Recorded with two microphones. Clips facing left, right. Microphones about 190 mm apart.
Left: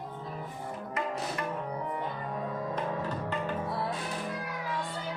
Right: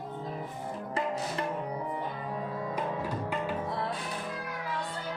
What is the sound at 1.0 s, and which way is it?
Music, 30° right (ahead or behind).